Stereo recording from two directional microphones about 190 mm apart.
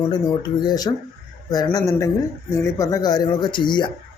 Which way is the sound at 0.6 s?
20° left (ahead or behind).